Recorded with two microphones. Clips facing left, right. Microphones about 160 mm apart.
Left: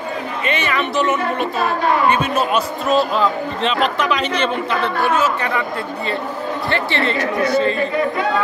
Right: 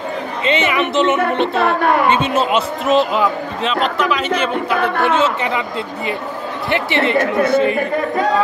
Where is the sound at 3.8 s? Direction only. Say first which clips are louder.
Right 1 dB; centre (ahead or behind).